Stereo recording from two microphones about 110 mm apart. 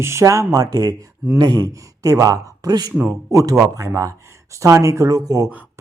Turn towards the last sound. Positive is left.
turn(degrees=-35)  # may be behind; listen again after turning